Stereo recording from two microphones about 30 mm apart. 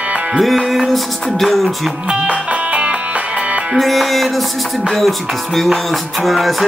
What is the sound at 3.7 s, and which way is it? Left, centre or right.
Music, centre.